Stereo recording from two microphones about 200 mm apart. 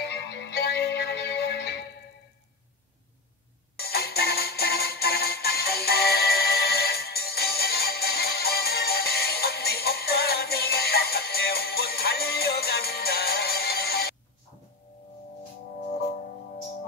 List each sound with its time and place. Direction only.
0.0 s music: 55° left (ahead or behind)
3.7 s music: 50° left (ahead or behind)